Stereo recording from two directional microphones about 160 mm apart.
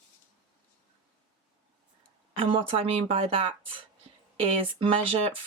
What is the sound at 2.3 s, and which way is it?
Speech, 35° right (ahead or behind).